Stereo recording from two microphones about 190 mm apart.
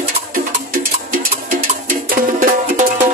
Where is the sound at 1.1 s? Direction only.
45° right (ahead or behind).